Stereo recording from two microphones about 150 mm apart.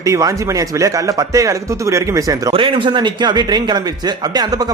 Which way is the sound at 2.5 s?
35° right (ahead or behind).